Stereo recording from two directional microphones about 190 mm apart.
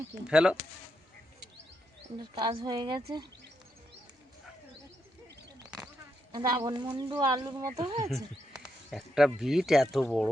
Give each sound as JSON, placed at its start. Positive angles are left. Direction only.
{"t": 0.3, "sound": "speech", "side_deg": -5}
{"t": 2.1, "sound": "speech", "side_deg": -25}
{"t": 6.3, "sound": "speech", "side_deg": -20}
{"t": 8.1, "sound": "speech", "side_deg": 0}